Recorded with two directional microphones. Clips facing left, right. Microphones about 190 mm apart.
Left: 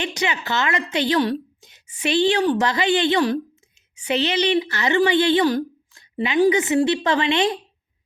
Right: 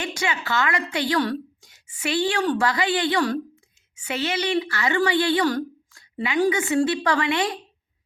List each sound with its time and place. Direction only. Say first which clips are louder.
0.0 s a woman's voice: left 2 dB; 20° left (ahead or behind)